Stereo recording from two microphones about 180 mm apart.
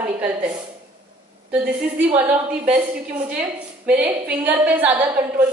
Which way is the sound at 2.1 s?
10° right (ahead or behind).